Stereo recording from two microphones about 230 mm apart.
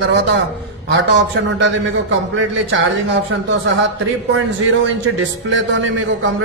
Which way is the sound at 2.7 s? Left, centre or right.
Right.